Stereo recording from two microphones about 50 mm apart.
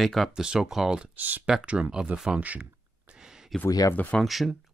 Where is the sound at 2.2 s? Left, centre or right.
Right.